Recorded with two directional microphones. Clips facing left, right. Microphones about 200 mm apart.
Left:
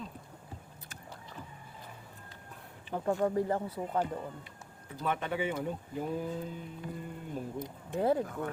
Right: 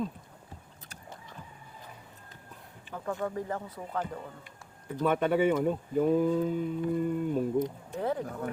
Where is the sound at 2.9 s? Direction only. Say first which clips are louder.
Left 4 dB; 25° left (ahead or behind).